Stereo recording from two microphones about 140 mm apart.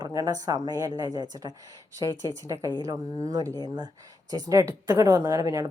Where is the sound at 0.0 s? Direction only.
25° right (ahead or behind).